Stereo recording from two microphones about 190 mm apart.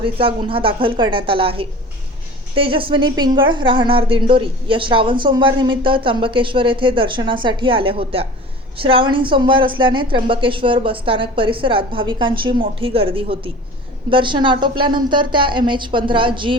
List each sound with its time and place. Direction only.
0.0 s a woman's voice: 25° right (ahead or behind)